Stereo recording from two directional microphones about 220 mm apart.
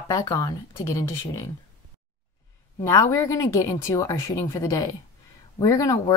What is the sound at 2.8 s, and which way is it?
Speech, 15° left (ahead or behind).